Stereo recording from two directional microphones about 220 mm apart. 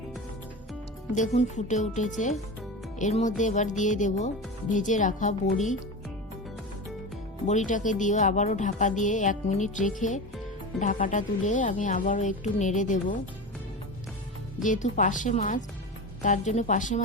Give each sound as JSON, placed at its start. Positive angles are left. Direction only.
{"t": 1.1, "sound": "speech", "side_deg": 30}
{"t": 7.4, "sound": "speech", "side_deg": 35}
{"t": 14.6, "sound": "speech", "side_deg": 35}